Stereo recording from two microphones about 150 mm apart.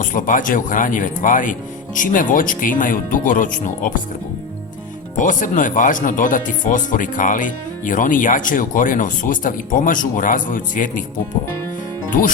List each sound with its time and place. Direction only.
0.0 s speech: 60° left (ahead or behind)
5.1 s speech: 60° left (ahead or behind)